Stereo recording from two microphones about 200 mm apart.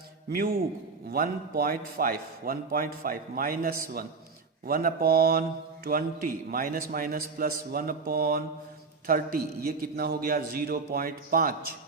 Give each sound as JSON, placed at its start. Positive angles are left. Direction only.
{"t": 0.3, "sound": "mantra", "side_deg": -50}